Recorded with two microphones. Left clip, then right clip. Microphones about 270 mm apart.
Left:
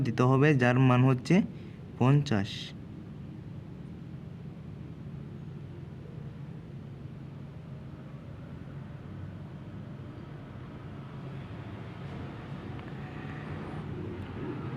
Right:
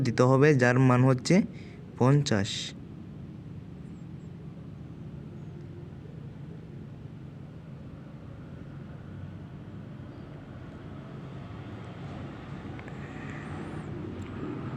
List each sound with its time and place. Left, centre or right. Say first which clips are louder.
0.0 s speech: right 4 dB; centre